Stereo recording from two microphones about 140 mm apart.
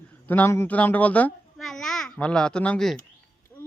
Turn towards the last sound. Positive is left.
turn(degrees=5)  # may be behind; listen again after turning